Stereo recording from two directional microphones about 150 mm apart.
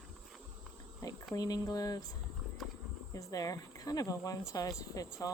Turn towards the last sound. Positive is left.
turn(degrees=25)  # may be behind; listen again after turning